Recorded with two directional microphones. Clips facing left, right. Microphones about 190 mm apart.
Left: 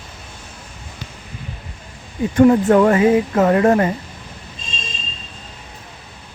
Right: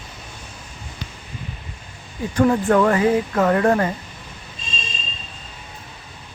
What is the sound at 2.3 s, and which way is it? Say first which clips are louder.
Speech: left 5 dB; 25° left (ahead or behind).